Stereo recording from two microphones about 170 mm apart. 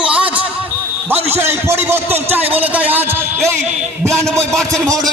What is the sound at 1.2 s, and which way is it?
A man's voice, 15° right (ahead or behind).